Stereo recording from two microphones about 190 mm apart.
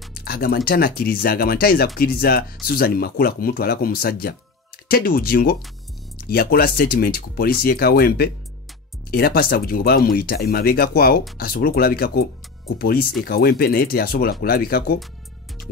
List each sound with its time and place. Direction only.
0.1 s music: 55° left (ahead or behind)
0.7 s speech: 55° left (ahead or behind)